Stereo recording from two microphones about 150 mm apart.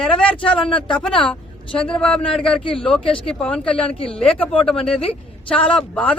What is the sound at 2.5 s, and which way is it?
Speech, 35° left (ahead or behind).